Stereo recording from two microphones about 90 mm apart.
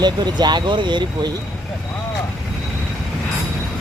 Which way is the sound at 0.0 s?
55° right (ahead or behind).